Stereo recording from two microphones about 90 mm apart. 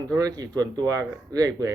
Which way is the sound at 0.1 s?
45° right (ahead or behind).